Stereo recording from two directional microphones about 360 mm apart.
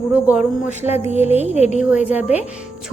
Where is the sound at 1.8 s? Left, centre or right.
Centre.